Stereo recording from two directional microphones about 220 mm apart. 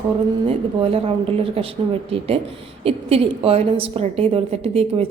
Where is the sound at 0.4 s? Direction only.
25° right (ahead or behind).